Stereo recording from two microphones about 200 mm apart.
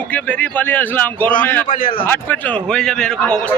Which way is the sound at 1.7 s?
45° left (ahead or behind).